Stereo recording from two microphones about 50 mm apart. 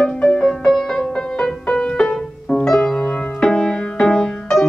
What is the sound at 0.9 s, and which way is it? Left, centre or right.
Music, centre.